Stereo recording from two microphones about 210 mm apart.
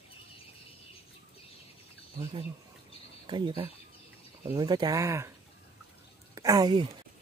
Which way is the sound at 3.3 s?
20° right (ahead or behind).